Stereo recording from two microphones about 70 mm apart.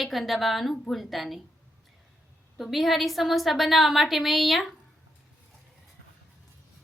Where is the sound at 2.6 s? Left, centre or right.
Centre.